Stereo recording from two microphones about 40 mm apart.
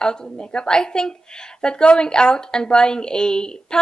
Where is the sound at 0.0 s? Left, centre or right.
Centre.